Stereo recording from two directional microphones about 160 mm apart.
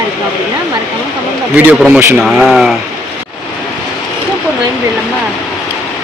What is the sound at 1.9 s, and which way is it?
Speech, 15° right (ahead or behind).